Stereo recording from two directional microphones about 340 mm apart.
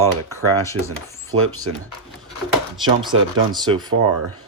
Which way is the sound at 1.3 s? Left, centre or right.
Right.